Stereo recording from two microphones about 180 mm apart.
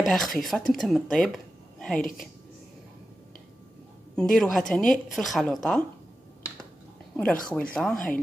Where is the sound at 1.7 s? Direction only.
5° left (ahead or behind).